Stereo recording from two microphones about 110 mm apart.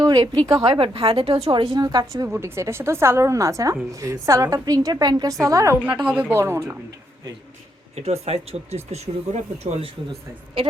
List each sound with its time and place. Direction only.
0.0 s a woman's voice: 35° right (ahead or behind)
0.7 s a woman's voice: 55° right (ahead or behind); by 2.2 s 40° right (ahead or behind)
2.2 s a woman's voice: 25° right (ahead or behind)
5.8 s speech: 10° right (ahead or behind)
7.9 s speech: 75° right (ahead or behind)